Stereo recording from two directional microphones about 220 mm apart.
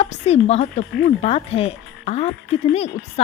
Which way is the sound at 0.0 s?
30° left (ahead or behind).